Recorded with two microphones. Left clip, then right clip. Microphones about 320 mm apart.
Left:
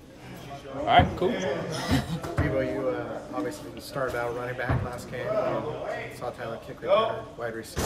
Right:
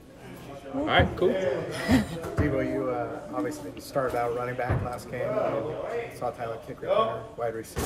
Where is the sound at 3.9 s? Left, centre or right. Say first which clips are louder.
Right 2 dB; centre.